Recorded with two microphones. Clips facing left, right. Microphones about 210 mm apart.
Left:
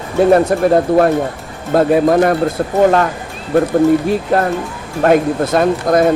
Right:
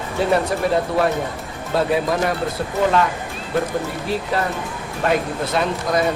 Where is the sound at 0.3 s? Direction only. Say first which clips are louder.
Left 8 dB; 50° left (ahead or behind).